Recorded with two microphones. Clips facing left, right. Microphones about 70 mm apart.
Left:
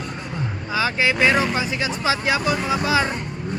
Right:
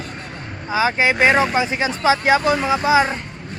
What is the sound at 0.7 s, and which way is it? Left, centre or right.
Speech, right.